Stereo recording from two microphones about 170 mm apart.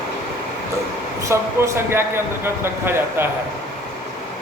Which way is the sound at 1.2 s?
15° right (ahead or behind).